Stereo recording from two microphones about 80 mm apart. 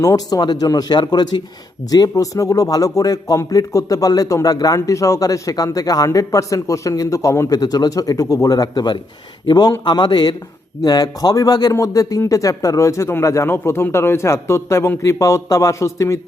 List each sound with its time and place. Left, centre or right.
0.0 s a man's voice: left
7.6 s a man's voice: left